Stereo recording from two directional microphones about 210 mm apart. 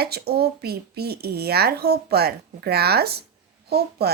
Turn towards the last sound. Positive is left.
turn(degrees=-50)  # may be behind; listen again after turning